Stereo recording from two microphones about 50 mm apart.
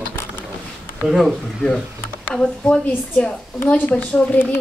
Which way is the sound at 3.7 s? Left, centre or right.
Left.